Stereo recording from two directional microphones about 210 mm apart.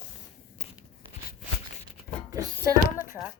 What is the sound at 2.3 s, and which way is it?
Speech, 15° right (ahead or behind).